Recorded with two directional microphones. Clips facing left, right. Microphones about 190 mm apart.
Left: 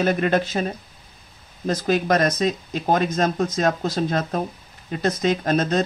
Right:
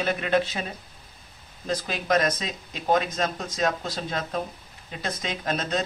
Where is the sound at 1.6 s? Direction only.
45° left (ahead or behind).